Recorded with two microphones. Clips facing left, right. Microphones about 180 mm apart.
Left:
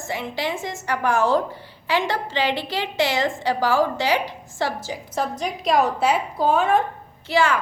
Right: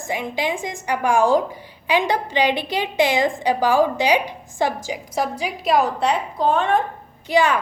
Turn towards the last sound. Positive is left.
turn(degrees=-15)  # may be behind; listen again after turning